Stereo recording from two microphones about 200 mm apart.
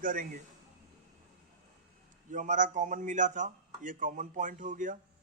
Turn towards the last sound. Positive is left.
turn(degrees=-40)  # may be behind; listen again after turning